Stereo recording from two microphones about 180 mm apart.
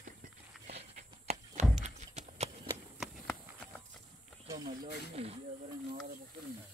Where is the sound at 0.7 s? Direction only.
35° right (ahead or behind).